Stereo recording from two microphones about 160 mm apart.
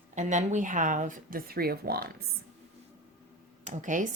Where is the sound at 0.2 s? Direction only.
50° right (ahead or behind); by 2.1 s 75° right (ahead or behind).